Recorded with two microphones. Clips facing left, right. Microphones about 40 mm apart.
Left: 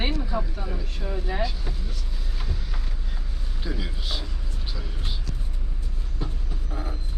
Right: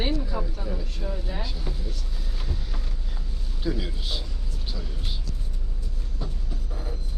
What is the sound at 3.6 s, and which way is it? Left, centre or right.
A man's voice, centre.